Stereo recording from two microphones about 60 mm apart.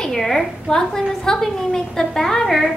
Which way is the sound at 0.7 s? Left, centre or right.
Centre.